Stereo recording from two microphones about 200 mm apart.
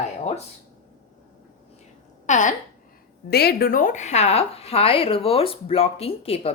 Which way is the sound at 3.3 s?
50° left (ahead or behind).